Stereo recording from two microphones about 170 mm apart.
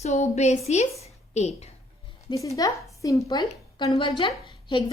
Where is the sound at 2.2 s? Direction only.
20° left (ahead or behind).